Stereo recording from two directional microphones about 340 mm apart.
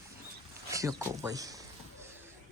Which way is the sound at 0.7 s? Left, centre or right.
Centre.